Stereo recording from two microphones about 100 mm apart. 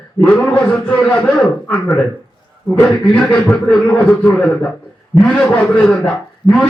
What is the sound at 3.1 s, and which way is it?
A man's voice, 10° left (ahead or behind).